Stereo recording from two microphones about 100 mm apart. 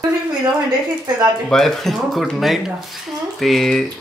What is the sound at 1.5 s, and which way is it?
Speech, 5° left (ahead or behind).